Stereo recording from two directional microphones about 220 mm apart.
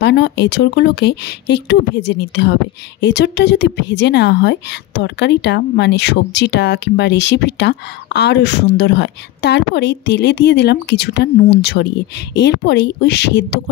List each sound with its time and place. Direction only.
0.0 s a woman's voice: 50° left (ahead or behind)